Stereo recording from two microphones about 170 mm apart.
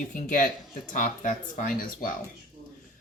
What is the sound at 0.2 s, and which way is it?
Speech, 50° left (ahead or behind).